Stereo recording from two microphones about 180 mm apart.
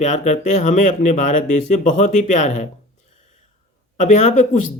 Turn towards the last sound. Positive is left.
turn(degrees=40)  # may be behind; listen again after turning